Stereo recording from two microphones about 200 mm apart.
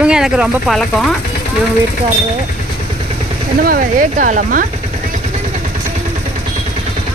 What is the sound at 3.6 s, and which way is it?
Speech, 45° right (ahead or behind).